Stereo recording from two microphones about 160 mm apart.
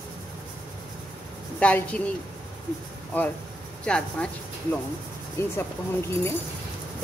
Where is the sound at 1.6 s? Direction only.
10° left (ahead or behind).